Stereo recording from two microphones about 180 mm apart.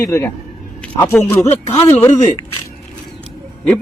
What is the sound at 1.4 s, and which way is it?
Speech, 35° left (ahead or behind).